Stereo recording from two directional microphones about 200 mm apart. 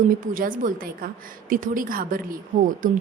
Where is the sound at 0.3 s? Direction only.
45° right (ahead or behind).